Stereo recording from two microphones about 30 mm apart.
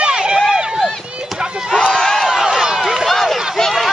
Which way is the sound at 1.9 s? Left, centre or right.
Centre.